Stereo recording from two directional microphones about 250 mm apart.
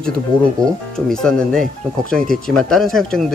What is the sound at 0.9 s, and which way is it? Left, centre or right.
Speech, centre.